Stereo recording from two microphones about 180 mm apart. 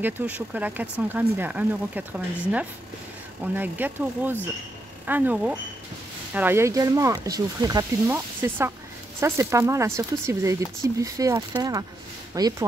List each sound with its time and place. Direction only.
0.0 s speech: 10° right (ahead or behind)